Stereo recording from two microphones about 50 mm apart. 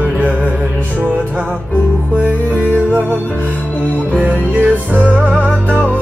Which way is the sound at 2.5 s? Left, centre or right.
Left.